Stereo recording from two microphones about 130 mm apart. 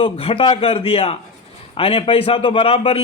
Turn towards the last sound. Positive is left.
turn(degrees=45)  # may be behind; listen again after turning